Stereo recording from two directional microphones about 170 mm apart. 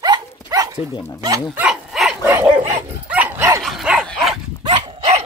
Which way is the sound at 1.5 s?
5° right (ahead or behind).